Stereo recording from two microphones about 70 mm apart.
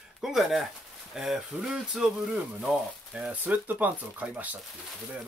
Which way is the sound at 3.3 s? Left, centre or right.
Right.